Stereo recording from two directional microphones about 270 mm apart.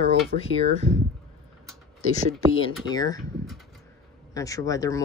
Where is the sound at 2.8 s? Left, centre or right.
Centre.